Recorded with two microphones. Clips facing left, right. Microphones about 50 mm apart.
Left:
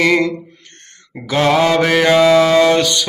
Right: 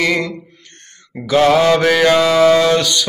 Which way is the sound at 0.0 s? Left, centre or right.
Left.